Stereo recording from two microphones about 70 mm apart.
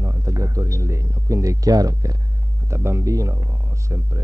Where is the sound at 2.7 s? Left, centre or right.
Right.